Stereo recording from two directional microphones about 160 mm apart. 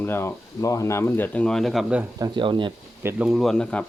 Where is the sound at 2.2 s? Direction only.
30° right (ahead or behind).